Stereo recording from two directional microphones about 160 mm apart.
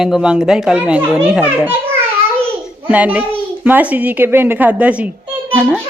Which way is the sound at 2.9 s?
10° right (ahead or behind).